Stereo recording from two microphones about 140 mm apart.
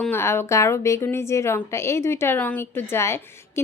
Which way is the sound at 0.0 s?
15° left (ahead or behind).